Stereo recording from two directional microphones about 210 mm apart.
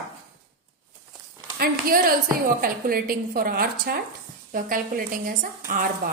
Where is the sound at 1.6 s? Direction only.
45° right (ahead or behind).